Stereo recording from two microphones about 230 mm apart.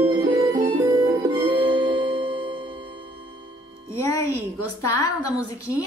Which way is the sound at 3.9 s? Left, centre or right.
Centre.